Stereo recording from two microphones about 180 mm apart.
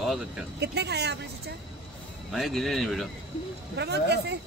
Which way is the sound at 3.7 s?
65° right (ahead or behind).